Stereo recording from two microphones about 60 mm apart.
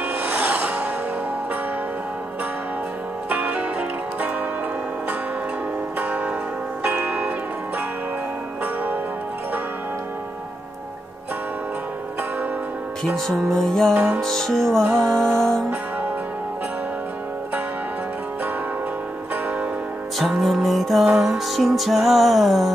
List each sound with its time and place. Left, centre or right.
0.2 s music: right
3.3 s music: right
5.9 s music: right
13.5 s music: centre
13.9 s music: right
14.2 s music: centre
20.2 s music: centre